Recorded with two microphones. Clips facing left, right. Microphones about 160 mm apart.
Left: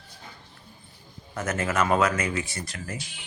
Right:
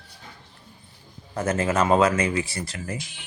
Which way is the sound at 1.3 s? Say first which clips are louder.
Right 4 dB; 30° right (ahead or behind).